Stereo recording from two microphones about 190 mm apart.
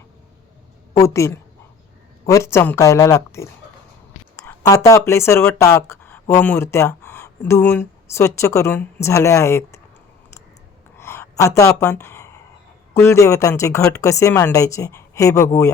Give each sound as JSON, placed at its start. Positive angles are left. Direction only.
{"t": 0.9, "sound": "a woman's voice", "side_deg": 15}
{"t": 10.9, "sound": "gasp", "side_deg": 15}
{"t": 12.9, "sound": "speech", "side_deg": 15}